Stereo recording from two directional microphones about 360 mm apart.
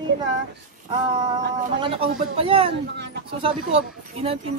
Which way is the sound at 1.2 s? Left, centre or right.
Centre.